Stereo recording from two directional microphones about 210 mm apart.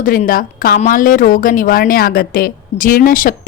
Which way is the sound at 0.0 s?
40° left (ahead or behind).